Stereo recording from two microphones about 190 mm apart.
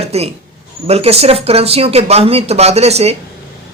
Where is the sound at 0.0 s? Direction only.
35° right (ahead or behind).